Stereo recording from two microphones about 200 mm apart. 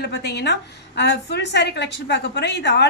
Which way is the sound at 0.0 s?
55° left (ahead or behind).